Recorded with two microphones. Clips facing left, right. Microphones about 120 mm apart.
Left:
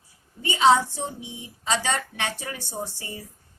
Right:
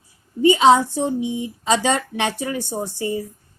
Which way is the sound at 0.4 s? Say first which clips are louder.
Right 6 dB; 15° right (ahead or behind).